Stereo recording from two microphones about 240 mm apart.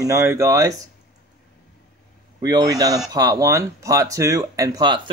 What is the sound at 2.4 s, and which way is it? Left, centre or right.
Speech, centre.